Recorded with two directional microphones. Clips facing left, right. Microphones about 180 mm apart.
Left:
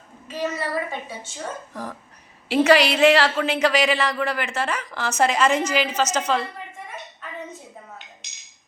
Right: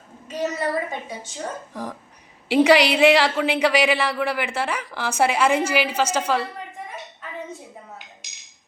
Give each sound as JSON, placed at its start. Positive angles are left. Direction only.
{"t": 0.3, "sound": "a woman's voice", "side_deg": -20}